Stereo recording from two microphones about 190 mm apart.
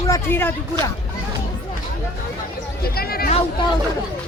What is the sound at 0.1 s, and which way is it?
Speech, 10° left (ahead or behind).